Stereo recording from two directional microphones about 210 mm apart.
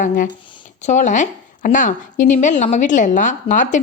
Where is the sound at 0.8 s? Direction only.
35° left (ahead or behind).